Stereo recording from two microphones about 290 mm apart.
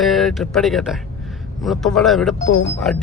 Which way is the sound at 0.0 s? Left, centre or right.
Centre.